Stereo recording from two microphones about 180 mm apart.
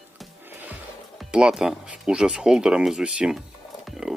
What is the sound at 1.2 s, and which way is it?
Speech, 5° right (ahead or behind).